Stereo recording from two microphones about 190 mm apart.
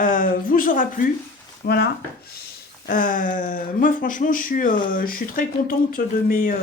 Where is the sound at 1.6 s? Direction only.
55° left (ahead or behind).